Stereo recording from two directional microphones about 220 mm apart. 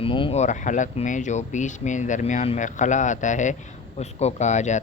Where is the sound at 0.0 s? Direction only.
25° left (ahead or behind).